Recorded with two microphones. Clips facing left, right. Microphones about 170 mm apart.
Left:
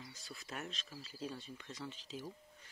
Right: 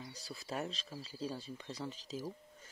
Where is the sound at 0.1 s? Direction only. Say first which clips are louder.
Right 9 dB; 35° right (ahead or behind).